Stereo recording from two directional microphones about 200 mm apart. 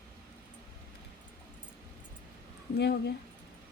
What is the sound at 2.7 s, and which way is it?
Speech, 55° left (ahead or behind).